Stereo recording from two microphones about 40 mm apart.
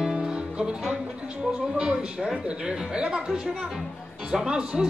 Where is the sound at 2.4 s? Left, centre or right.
Right.